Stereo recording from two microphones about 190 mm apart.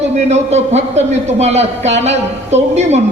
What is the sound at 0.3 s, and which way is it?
A man's voice, 35° right (ahead or behind).